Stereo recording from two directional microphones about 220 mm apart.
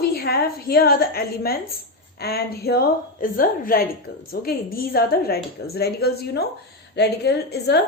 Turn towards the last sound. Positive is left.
turn(degrees=50)  # may be behind; listen again after turning